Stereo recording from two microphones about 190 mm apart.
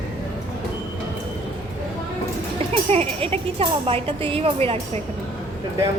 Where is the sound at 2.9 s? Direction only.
30° right (ahead or behind).